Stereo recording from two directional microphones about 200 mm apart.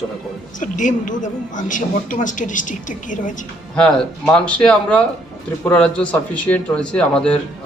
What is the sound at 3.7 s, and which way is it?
A man's voice, 5° left (ahead or behind).